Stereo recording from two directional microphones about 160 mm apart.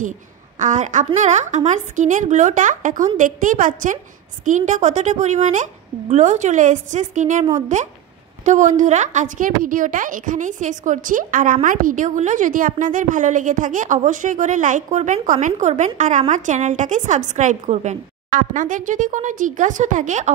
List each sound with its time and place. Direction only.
0.6 s a woman's voice: 50° right (ahead or behind)